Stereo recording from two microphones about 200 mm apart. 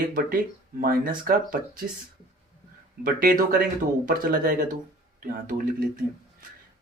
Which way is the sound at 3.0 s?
45° right (ahead or behind).